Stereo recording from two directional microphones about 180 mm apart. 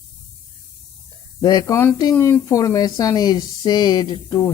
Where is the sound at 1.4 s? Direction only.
20° left (ahead or behind).